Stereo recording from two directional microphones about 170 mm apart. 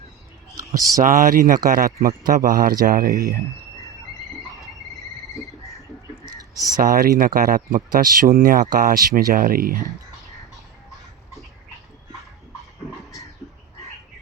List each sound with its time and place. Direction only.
0.5 s a sound: 20° right (ahead or behind)
1.0 s speech: 50° right (ahead or behind)
6.7 s speech: 55° right (ahead or behind)